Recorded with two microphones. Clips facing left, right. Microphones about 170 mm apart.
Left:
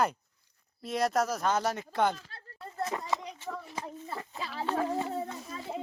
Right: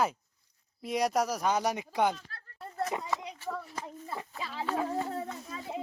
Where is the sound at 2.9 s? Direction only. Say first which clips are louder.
Even; 15° right (ahead or behind).